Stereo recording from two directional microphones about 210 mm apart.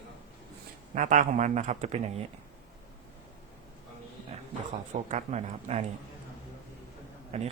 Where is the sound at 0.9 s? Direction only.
40° right (ahead or behind).